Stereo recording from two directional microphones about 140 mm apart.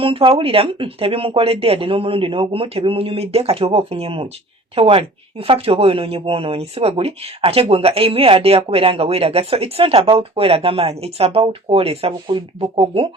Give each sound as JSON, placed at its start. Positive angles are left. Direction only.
{"t": 0.0, "sound": "speech", "side_deg": -40}